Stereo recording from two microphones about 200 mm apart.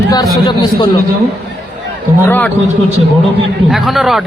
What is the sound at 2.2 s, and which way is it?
Speech, 10° left (ahead or behind).